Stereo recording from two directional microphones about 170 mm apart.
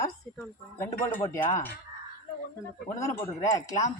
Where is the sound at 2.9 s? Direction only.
15° left (ahead or behind).